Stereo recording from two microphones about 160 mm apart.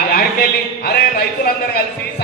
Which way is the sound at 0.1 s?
70° left (ahead or behind).